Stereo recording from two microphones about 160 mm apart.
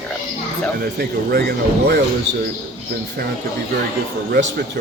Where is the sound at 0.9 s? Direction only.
80° right.